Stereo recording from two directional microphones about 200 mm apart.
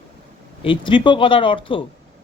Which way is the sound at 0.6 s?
25° left (ahead or behind).